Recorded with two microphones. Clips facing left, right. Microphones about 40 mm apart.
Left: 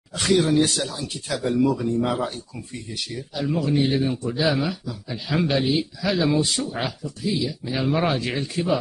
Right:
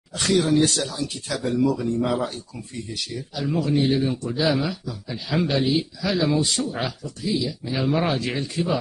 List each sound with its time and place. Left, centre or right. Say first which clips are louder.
0.2 s speech: even; centre
3.4 s speech: right 1 dB; centre